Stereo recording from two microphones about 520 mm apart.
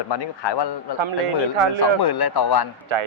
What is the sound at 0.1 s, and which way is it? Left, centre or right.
Speech, left.